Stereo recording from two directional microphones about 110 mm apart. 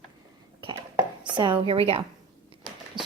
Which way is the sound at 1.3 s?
45° right (ahead or behind).